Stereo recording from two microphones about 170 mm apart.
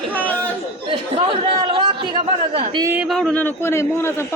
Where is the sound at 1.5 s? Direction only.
30° right (ahead or behind).